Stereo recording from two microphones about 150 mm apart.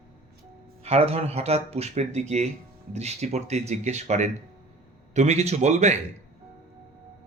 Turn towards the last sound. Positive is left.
turn(degrees=-50)  # may be behind; listen again after turning